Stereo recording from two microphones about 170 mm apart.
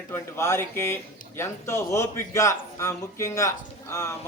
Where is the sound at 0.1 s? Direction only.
15° left (ahead or behind).